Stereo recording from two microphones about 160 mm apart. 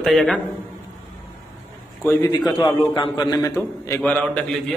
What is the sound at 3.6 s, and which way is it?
A man's voice, 15° left (ahead or behind).